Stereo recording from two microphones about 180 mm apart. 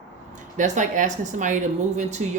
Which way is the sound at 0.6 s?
45° right (ahead or behind).